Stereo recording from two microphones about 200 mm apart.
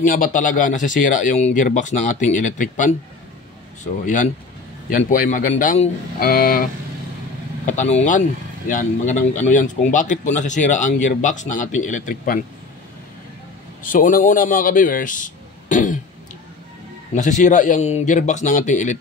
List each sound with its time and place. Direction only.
0.0 s a man's voice: 40° left (ahead or behind)
7.6 s a man's voice: 35° left (ahead or behind)
13.8 s a man's voice: 45° left (ahead or behind)
17.1 s a man's voice: 40° left (ahead or behind)